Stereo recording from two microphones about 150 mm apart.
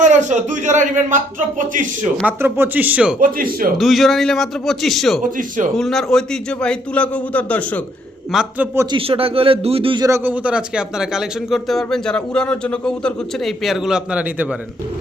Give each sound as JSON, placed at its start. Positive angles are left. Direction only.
{"t": 0.0, "sound": "speech", "side_deg": -55}
{"t": 2.2, "sound": "speech", "side_deg": -15}
{"t": 3.2, "sound": "speech", "side_deg": -70}
{"t": 3.8, "sound": "speech", "side_deg": 0}
{"t": 5.2, "sound": "speech", "side_deg": -60}
{"t": 5.7, "sound": "a man's voice", "side_deg": 0}
{"t": 8.3, "sound": "speech", "side_deg": -5}
{"t": 8.9, "sound": "speech", "side_deg": -40}
{"t": 10.1, "sound": "speech", "side_deg": -10}